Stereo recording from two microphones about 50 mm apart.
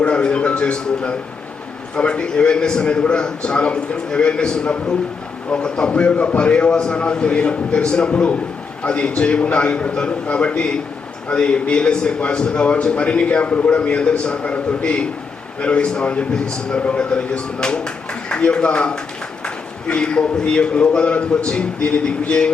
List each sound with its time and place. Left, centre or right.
0.0 s music: left
2.0 s a man's voice: left